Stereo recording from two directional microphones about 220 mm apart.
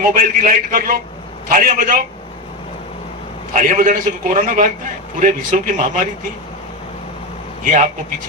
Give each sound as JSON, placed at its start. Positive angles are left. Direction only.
{"t": 0.0, "sound": "a man's voice", "side_deg": -40}
{"t": 3.5, "sound": "a man's voice", "side_deg": -35}
{"t": 7.6, "sound": "a man's voice", "side_deg": -35}